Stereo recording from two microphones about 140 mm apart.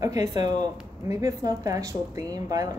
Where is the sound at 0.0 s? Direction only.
25° right (ahead or behind).